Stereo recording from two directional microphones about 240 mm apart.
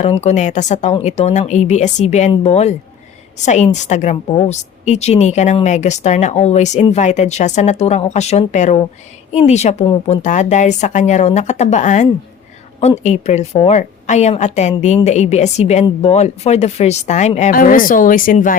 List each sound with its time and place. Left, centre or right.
0.0 s a woman's voice: left